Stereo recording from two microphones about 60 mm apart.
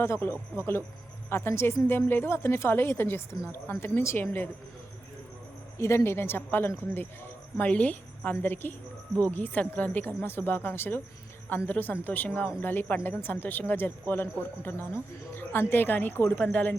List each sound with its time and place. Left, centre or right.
0.0 s a woman's voice: left
5.7 s speech: left
7.6 s a woman's voice: left
16.4 s a woman's voice: left